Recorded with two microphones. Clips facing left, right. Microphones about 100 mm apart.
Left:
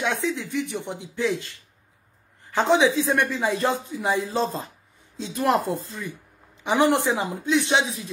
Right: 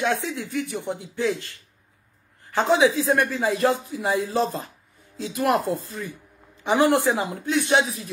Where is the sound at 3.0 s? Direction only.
25° right (ahead or behind).